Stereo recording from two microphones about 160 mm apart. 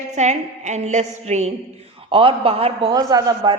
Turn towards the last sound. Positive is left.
turn(degrees=-25)  # may be behind; listen again after turning